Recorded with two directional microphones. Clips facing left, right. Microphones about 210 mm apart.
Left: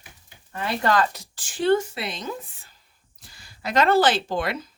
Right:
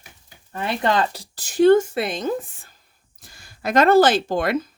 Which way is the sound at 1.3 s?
40° right (ahead or behind).